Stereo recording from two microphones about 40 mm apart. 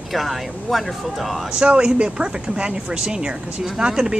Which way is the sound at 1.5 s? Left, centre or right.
Right.